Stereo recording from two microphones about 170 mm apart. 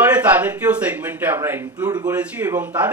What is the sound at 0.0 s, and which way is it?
A man's voice, 10° right (ahead or behind).